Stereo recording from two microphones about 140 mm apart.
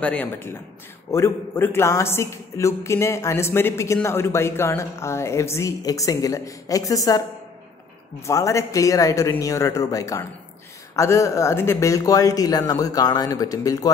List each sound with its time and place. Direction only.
0.0 s a man's voice: 10° left (ahead or behind); by 13.8 s 25° left (ahead or behind)